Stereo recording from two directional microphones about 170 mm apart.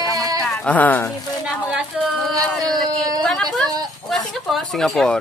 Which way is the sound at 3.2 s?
5° left (ahead or behind).